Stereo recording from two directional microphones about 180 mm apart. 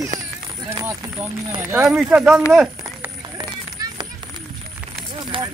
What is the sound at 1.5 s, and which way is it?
Speech, 15° right (ahead or behind).